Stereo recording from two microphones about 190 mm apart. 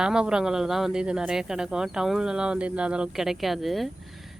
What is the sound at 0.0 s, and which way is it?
Speech, 5° right (ahead or behind).